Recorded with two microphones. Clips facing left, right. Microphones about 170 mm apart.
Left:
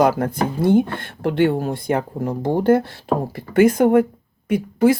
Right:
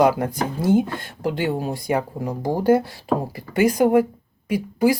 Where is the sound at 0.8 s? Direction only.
60° left (ahead or behind).